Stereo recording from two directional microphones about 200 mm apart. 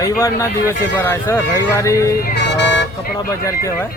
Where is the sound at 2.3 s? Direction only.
60° left (ahead or behind).